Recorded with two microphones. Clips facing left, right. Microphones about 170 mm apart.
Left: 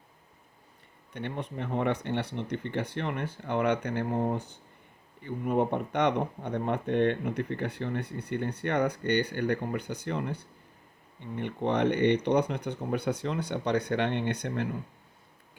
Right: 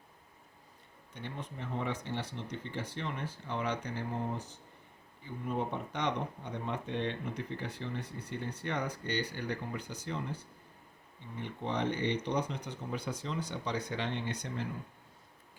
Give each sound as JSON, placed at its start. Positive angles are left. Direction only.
{"t": 1.1, "sound": "speech", "side_deg": 65}